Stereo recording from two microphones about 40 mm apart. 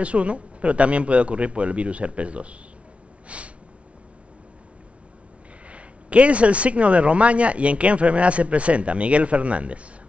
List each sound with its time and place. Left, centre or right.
0.0 s speech: right
3.3 s snort: right
5.7 s speech: right